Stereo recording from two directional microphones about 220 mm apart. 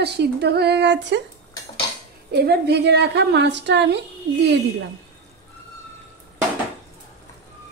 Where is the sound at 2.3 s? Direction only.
50° right (ahead or behind).